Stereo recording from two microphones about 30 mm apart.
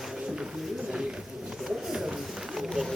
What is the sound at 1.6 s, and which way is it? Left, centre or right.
Bird, centre.